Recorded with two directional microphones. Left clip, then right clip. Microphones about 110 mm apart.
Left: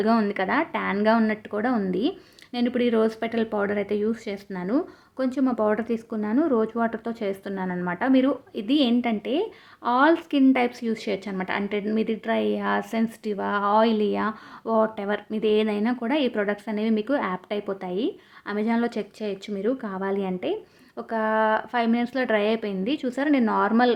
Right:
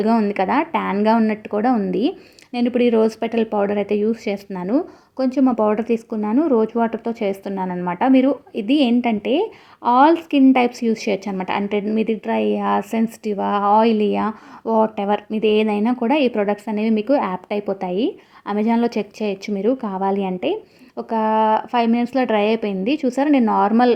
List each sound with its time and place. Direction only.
0.3 s a woman's voice: 35° right (ahead or behind)